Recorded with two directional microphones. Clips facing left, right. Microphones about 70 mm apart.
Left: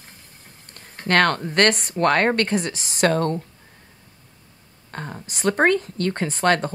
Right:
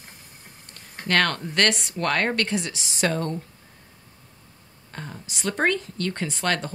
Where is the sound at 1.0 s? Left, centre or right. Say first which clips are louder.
Left 4 dB; left.